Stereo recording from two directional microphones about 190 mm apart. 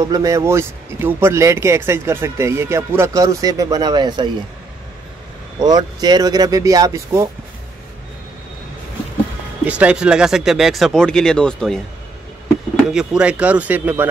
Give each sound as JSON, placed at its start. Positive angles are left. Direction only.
{"t": 0.0, "sound": "speech", "side_deg": -15}
{"t": 5.6, "sound": "speech", "side_deg": -20}
{"t": 9.7, "sound": "speech", "side_deg": -5}
{"t": 12.9, "sound": "speech", "side_deg": -5}